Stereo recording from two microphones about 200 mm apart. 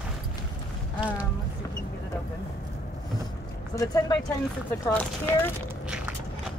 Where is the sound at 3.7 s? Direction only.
20° left (ahead or behind).